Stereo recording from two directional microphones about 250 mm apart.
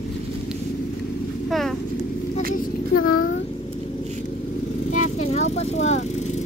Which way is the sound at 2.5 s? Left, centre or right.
Left.